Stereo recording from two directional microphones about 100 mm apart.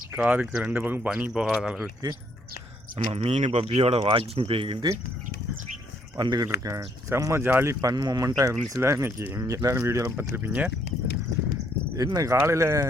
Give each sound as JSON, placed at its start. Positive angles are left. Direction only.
{"t": 0.2, "sound": "speech", "side_deg": -10}
{"t": 3.1, "sound": "speech", "side_deg": -90}
{"t": 6.1, "sound": "speech", "side_deg": -45}
{"t": 11.9, "sound": "speech", "side_deg": -35}